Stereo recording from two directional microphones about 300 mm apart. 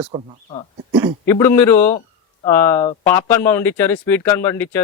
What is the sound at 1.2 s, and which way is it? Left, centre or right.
Speech, centre.